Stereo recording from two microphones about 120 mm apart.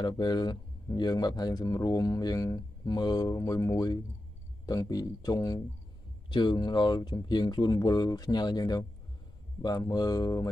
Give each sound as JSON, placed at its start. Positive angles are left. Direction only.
{"t": 0.0, "sound": "speech", "side_deg": 35}